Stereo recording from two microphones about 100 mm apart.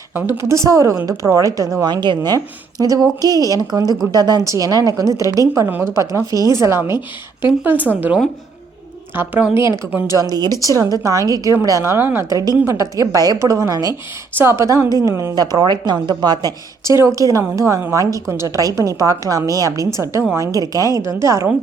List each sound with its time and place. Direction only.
0.1 s a woman's voice: 20° right (ahead or behind)
5.6 s speech: 20° right (ahead or behind)
5.9 s a woman's voice: 30° right (ahead or behind); by 9.5 s 15° right (ahead or behind)
9.6 s a woman's voice: 30° right (ahead or behind)